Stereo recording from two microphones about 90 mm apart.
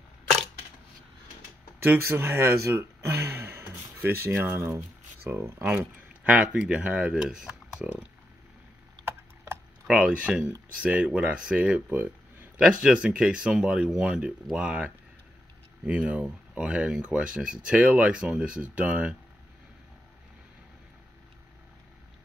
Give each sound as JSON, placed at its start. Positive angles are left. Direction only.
{"t": 1.8, "sound": "speech", "side_deg": -25}
{"t": 5.7, "sound": "speech", "side_deg": -15}
{"t": 9.0, "sound": "a sound", "side_deg": -25}
{"t": 9.8, "sound": "speech", "side_deg": -10}